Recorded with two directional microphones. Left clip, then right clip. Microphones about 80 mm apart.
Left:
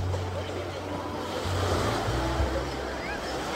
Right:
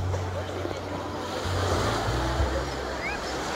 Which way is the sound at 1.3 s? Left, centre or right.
Right.